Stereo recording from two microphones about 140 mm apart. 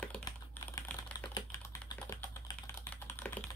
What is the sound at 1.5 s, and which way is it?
Typing, 20° left (ahead or behind).